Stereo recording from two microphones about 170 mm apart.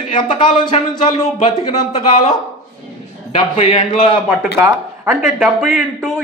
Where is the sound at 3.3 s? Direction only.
35° left (ahead or behind).